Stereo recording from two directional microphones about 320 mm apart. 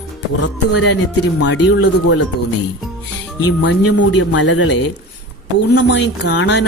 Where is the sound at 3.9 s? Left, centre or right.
Left.